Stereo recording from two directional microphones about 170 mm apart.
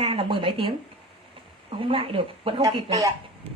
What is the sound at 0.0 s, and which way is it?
Speech, 30° right (ahead or behind).